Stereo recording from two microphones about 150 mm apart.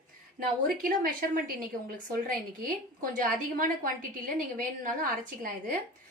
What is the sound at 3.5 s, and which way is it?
A woman's voice, 65° right (ahead or behind).